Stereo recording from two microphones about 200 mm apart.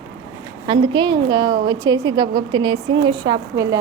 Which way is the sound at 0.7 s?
25° right (ahead or behind).